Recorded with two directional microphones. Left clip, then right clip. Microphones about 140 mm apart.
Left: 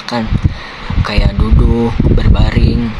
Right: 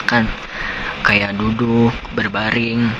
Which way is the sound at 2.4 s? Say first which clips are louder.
Right 1 dB; 45° left (ahead or behind).